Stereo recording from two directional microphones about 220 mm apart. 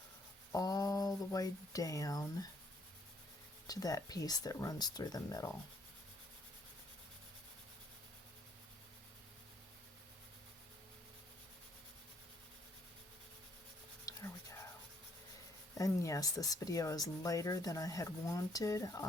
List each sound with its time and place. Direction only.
0.5 s speech: 15° left (ahead or behind)
3.7 s speech: 15° left (ahead or behind)
14.1 s writing: 15° left (ahead or behind)
15.8 s speech: 15° left (ahead or behind)